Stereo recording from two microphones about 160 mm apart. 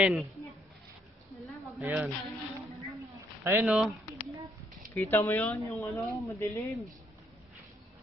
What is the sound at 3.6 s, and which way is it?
Speech, centre (ahead or behind).